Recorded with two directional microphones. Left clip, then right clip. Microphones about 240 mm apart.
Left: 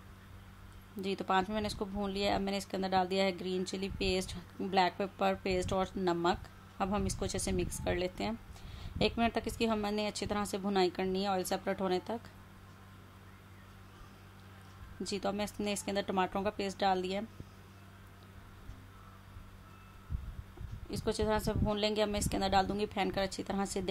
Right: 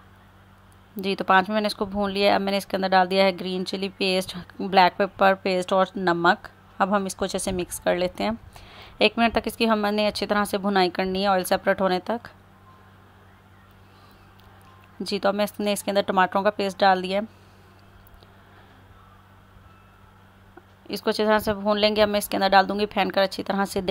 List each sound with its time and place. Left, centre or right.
0.9 s a woman's voice: right
15.0 s a woman's voice: right
20.9 s a woman's voice: right